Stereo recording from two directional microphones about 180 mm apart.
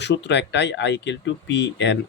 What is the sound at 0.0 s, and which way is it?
Speech, 75° left (ahead or behind).